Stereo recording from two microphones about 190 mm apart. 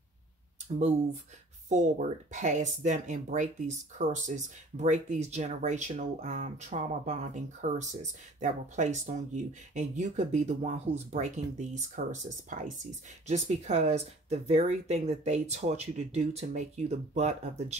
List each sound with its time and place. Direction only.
0.7 s speech: 35° right (ahead or behind)